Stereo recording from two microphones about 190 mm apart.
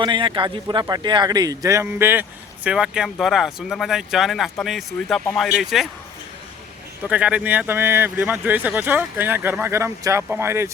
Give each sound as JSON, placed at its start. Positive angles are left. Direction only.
{"t": 0.0, "sound": "a man's voice", "side_deg": -25}
{"t": 7.0, "sound": "speech", "side_deg": -5}